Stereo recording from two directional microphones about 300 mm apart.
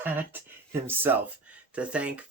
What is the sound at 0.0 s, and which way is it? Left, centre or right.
Speech, centre.